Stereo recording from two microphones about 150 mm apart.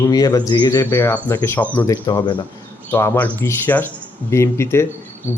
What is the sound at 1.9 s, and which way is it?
Speech, 30° left (ahead or behind).